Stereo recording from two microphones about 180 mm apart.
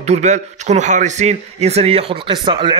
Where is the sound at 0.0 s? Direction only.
40° right (ahead or behind).